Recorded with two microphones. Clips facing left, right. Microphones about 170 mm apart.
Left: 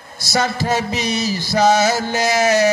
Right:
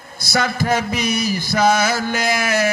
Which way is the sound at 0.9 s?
20° left (ahead or behind).